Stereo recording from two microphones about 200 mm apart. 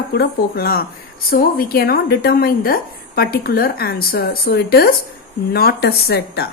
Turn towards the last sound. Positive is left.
turn(degrees=50)  # may be behind; listen again after turning